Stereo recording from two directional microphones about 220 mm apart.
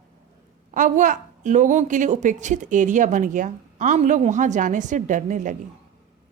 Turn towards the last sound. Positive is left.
turn(degrees=-35)  # may be behind; listen again after turning